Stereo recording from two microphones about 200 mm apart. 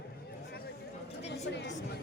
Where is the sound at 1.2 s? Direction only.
60° left (ahead or behind).